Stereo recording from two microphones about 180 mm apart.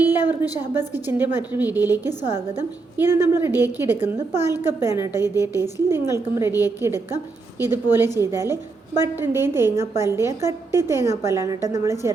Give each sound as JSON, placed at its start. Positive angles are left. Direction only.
{"t": 0.1, "sound": "a woman's voice", "side_deg": -10}